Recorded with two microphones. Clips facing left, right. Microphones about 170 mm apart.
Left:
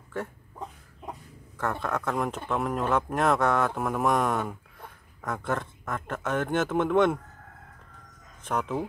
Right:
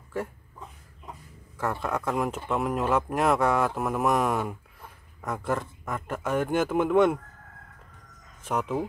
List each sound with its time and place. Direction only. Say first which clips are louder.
1.6 s speech: right 1 dB; 10° right (ahead or behind)
8.5 s speech: right 1 dB; 5° right (ahead or behind)